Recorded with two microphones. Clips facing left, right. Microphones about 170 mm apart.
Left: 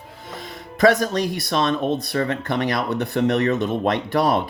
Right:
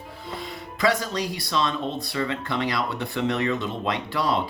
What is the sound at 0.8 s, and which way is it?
Speech, 50° left (ahead or behind).